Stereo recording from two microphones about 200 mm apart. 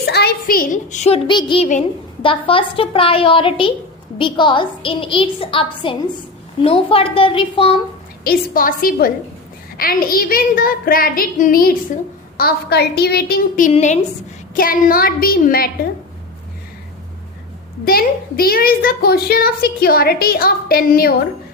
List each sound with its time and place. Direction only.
0.0 s a woman's voice: 55° left (ahead or behind); by 7.8 s 25° left (ahead or behind)
8.2 s a child's voice: 45° left (ahead or behind)
14.5 s a child's voice: 45° left (ahead or behind)
17.8 s a child's voice: 50° left (ahead or behind)